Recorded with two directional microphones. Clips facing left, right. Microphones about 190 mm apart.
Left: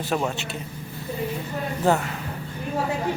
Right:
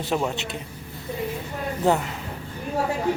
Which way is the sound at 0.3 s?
20° right (ahead or behind).